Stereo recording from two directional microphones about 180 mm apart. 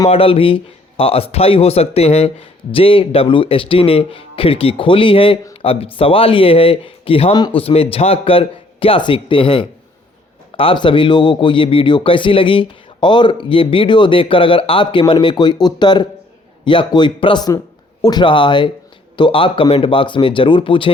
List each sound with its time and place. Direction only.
0.1 s speech: 30° left (ahead or behind)